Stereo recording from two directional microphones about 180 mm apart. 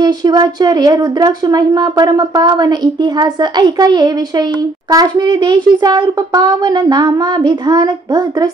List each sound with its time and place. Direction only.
0.0 s speech: 25° right (ahead or behind)